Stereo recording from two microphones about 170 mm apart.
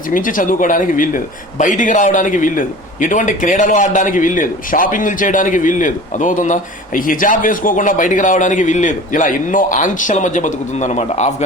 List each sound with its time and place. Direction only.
0.1 s a man's voice: 55° left (ahead or behind)